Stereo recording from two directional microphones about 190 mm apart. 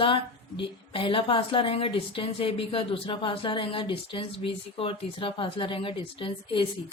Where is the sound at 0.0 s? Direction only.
25° left (ahead or behind).